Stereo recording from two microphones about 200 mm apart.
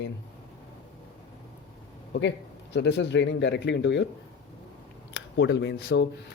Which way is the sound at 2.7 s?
60° left (ahead or behind).